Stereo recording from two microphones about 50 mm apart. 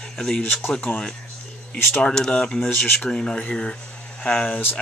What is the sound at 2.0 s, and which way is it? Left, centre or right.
Speech, centre.